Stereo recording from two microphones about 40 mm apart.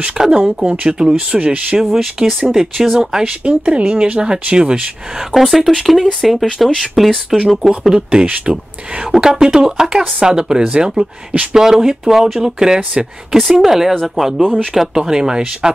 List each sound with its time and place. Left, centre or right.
0.2 s speech: centre
1.8 s speech: centre
3.4 s speech: right
5.3 s speech: centre
7.8 s speech: centre